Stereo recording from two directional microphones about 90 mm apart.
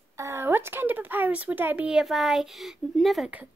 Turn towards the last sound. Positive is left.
turn(degrees=0)  # may be behind; listen again after turning